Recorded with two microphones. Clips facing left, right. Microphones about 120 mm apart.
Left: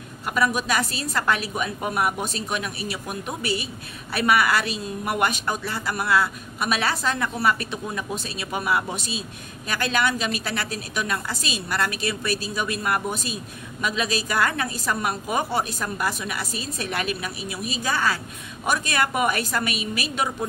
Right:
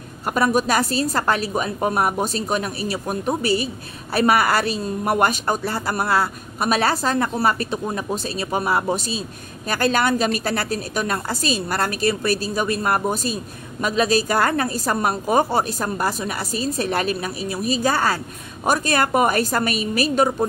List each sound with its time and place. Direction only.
0.3 s a woman's voice: 40° right (ahead or behind)